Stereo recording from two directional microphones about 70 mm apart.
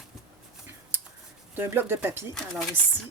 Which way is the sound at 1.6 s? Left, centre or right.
Right.